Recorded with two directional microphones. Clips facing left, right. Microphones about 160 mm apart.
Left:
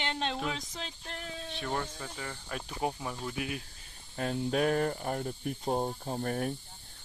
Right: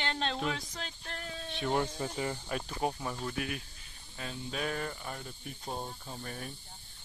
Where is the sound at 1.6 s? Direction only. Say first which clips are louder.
Right 5 dB; 15° right (ahead or behind).